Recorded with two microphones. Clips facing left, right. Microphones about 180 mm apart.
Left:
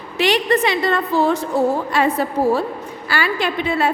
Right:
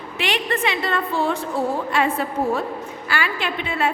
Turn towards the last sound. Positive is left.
turn(degrees=35)  # may be behind; listen again after turning